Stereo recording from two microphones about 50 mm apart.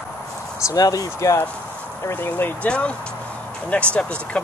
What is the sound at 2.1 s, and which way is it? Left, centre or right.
Speech, left.